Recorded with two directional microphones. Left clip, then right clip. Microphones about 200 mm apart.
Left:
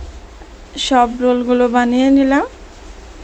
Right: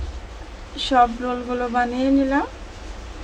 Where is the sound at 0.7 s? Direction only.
35° left (ahead or behind).